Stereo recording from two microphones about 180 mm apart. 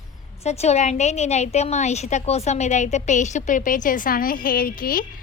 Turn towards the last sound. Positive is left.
turn(degrees=50)  # may be behind; listen again after turning